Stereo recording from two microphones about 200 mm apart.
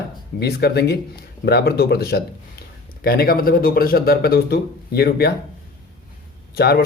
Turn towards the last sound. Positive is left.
turn(degrees=55)  # may be behind; listen again after turning